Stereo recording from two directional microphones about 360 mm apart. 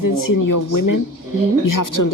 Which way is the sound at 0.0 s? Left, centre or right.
Left.